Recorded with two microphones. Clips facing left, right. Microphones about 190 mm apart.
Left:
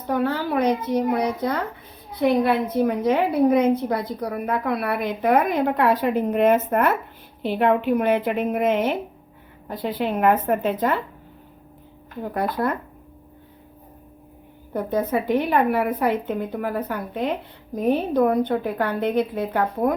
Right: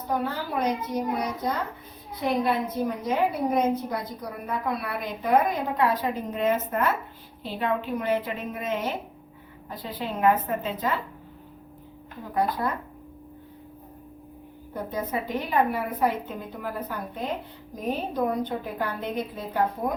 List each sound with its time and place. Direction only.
0.1 s a woman's voice: 70° left (ahead or behind)
12.3 s a woman's voice: 65° left (ahead or behind)
14.7 s a woman's voice: 60° left (ahead or behind)